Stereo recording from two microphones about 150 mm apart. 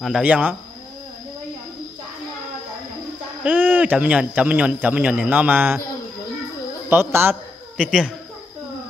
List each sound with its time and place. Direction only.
0.0 s speech: 5° right (ahead or behind)
3.4 s speech: 10° right (ahead or behind)
6.9 s a man's voice: 15° right (ahead or behind)